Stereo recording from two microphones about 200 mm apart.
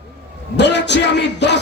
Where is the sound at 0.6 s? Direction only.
60° left (ahead or behind).